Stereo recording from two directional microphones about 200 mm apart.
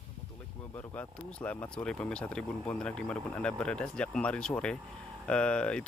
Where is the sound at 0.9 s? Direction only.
10° left (ahead or behind).